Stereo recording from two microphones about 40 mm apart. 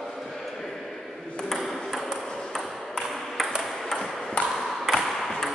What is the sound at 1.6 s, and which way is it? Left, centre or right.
Ping, centre.